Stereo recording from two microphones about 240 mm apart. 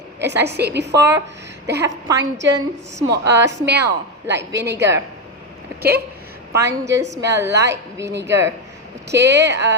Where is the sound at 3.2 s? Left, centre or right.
Right.